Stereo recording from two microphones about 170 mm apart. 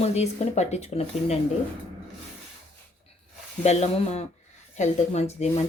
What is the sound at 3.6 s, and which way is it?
Speech, 40° left (ahead or behind).